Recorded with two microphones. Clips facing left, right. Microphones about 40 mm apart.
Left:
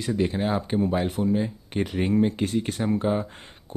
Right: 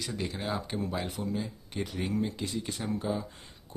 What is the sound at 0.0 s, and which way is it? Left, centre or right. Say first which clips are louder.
Speech: left 10 dB; left.